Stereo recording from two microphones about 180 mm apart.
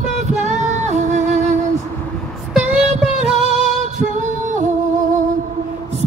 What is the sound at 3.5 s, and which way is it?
Female singing, 40° right (ahead or behind).